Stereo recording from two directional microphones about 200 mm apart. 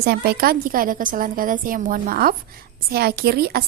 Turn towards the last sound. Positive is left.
turn(degrees=-50)  # may be behind; listen again after turning